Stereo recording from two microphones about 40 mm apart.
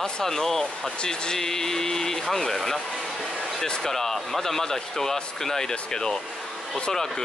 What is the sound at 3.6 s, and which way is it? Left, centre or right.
Speech, centre.